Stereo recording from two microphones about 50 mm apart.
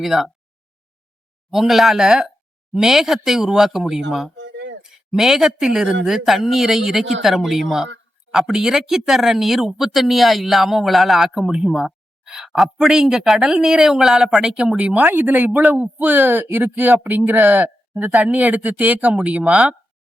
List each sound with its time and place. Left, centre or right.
0.0 s a man's voice: centre
1.5 s a man's voice: centre
12.2 s a sound: centre
12.5 s speech: centre
14.4 s speech: right
15.0 s speech: right